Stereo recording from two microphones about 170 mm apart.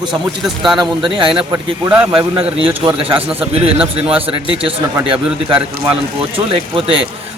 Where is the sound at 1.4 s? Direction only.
25° right (ahead or behind).